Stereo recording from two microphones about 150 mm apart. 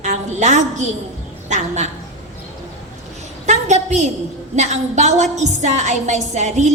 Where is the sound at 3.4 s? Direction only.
50° right (ahead or behind).